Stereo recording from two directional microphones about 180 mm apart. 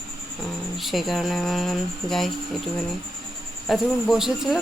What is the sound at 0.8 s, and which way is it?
Speech, centre (ahead or behind).